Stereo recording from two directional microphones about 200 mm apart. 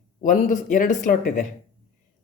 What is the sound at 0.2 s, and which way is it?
Speech, 40° left (ahead or behind).